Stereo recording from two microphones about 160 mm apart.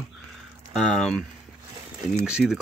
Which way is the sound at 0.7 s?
5° left (ahead or behind).